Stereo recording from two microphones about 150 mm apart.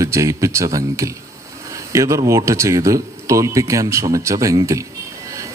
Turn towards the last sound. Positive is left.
turn(degrees=-20)  # may be behind; listen again after turning